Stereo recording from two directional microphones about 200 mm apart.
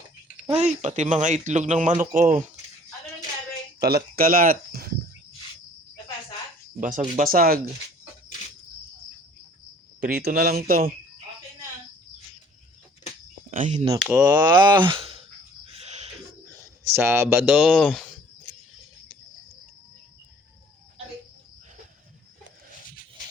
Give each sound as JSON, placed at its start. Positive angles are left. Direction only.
{"t": 0.5, "sound": "speech", "side_deg": -35}
{"t": 3.8, "sound": "speech", "side_deg": -50}
{"t": 6.7, "sound": "speech", "side_deg": -40}
{"t": 10.0, "sound": "speech", "side_deg": -50}
{"t": 13.5, "sound": "speech", "side_deg": -40}
{"t": 14.0, "sound": "speech", "side_deg": -5}
{"t": 14.3, "sound": "speech", "side_deg": -20}
{"t": 15.7, "sound": "a sound", "side_deg": -35}
{"t": 16.9, "sound": "speech", "side_deg": -10}